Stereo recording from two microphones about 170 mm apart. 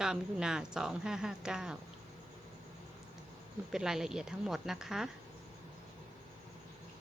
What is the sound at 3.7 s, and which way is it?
Speech, 5° right (ahead or behind).